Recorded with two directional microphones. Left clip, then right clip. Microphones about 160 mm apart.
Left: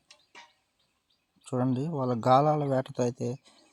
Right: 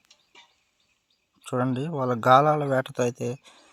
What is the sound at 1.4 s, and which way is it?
Speech, 5° right (ahead or behind).